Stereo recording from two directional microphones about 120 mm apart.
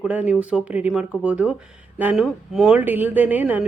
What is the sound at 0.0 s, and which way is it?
Speech, 10° right (ahead or behind).